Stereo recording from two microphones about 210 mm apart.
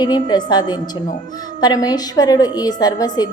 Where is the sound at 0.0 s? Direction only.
20° left (ahead or behind).